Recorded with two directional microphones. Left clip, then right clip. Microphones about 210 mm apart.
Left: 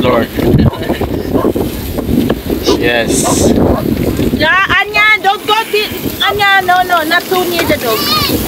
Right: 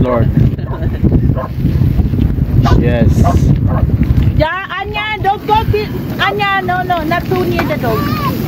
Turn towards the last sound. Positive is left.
turn(degrees=-5)  # may be behind; listen again after turning